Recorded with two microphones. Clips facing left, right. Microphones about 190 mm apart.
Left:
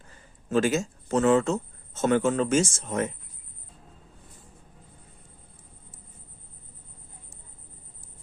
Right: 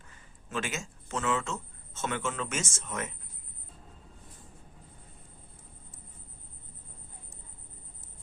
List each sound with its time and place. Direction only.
0.1 s speech: 35° left (ahead or behind)